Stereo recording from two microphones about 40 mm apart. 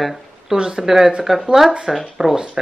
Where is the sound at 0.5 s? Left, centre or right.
Centre.